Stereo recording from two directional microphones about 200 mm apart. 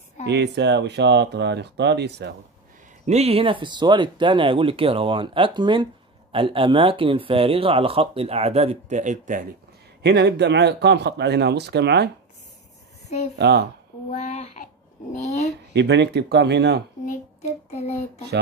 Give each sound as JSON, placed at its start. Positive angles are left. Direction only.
{"t": 0.3, "sound": "speech", "side_deg": -60}
{"t": 3.1, "sound": "speech", "side_deg": -30}
{"t": 10.0, "sound": "speech", "side_deg": -55}
{"t": 13.4, "sound": "speech", "side_deg": -55}
{"t": 14.1, "sound": "child singing", "side_deg": 35}
{"t": 15.1, "sound": "speech", "side_deg": 35}
{"t": 15.7, "sound": "speech", "side_deg": -60}
{"t": 17.0, "sound": "child singing", "side_deg": 35}